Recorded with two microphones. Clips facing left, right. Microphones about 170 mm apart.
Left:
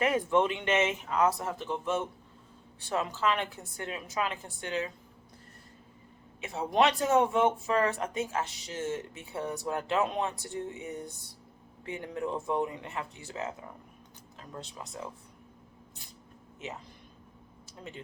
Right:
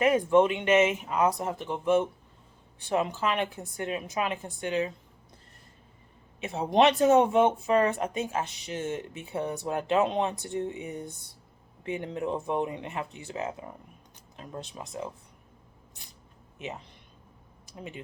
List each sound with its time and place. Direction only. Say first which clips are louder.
0.0 s speech: right 5 dB; 15° right (ahead or behind)
6.4 s speech: right 4 dB; 25° right (ahead or behind)
17.7 s speech: right 3 dB; 15° right (ahead or behind)